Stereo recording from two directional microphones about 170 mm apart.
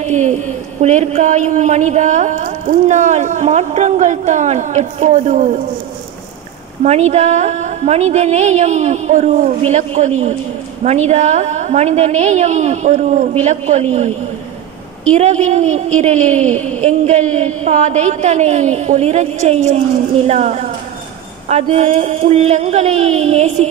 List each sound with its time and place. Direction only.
0.0 s a woman's voice: 45° right (ahead or behind)
6.8 s a woman's voice: 40° right (ahead or behind)
15.1 s a woman's voice: 40° right (ahead or behind)